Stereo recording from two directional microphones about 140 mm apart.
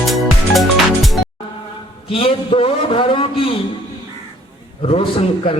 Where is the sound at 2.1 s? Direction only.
40° left (ahead or behind).